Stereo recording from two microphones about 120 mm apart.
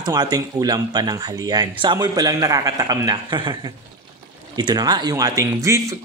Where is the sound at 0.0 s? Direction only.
35° right (ahead or behind).